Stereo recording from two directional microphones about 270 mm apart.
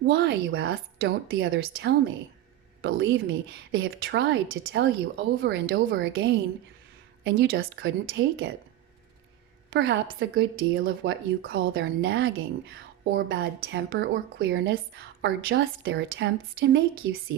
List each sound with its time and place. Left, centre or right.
0.0 s a woman's voice: right
9.7 s a woman's voice: right